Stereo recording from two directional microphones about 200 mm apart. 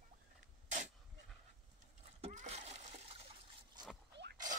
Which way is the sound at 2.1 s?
35° right (ahead or behind).